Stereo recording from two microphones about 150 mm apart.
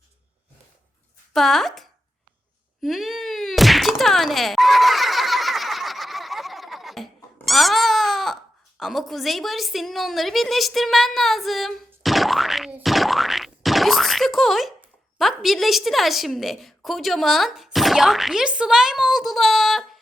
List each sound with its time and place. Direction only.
1.3 s speech: centre (ahead or behind)
2.8 s a sound: centre (ahead or behind)
8.8 s a woman's voice: centre (ahead or behind)
12.0 s boing: centre (ahead or behind)
15.2 s a woman's voice: centre (ahead or behind)